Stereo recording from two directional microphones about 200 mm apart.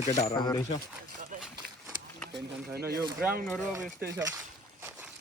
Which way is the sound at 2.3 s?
50° right (ahead or behind).